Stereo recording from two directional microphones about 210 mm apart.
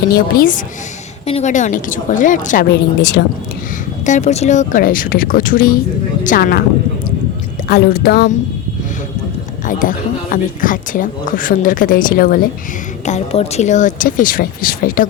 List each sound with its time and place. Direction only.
0.1 s a woman's voice: 40° left (ahead or behind)
2.6 s speech: 50° left (ahead or behind)
4.0 s a woman's voice: 35° left (ahead or behind)
7.7 s speech: 45° left (ahead or behind)
9.6 s a woman's voice: 40° left (ahead or behind)
13.1 s a woman's voice: 30° left (ahead or behind)